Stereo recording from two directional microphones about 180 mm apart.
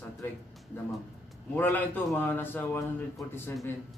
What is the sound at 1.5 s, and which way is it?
A man's voice, 10° left (ahead or behind).